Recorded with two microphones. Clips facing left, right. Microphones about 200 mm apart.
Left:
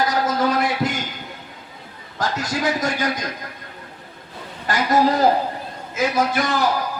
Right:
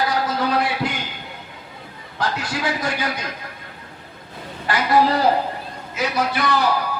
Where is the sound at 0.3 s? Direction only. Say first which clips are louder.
Left 1 dB; 45° left (ahead or behind).